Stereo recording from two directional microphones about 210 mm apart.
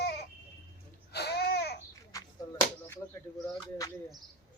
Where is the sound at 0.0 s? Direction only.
50° left (ahead or behind).